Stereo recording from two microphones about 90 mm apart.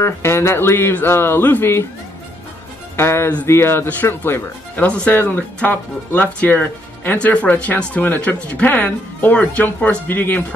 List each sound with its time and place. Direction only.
0.0 s speech: 30° left (ahead or behind)
3.0 s speech: 30° left (ahead or behind)